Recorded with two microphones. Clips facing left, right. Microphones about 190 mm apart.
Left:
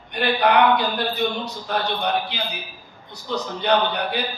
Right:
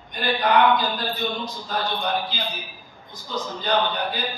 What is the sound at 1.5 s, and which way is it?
Speech, 65° left (ahead or behind).